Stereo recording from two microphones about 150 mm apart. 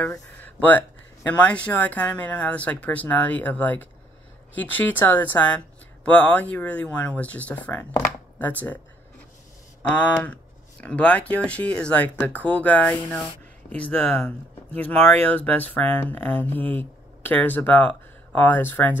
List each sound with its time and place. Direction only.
0.6 s speech: 10° left (ahead or behind)
9.8 s speech: 10° left (ahead or behind)